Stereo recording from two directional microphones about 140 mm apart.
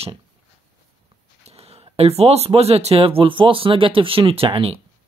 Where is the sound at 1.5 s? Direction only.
45° right (ahead or behind).